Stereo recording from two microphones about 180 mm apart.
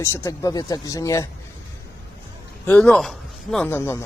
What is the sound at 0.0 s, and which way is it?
A man's voice, 15° left (ahead or behind).